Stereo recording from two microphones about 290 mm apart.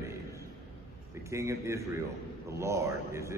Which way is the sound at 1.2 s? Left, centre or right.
Centre.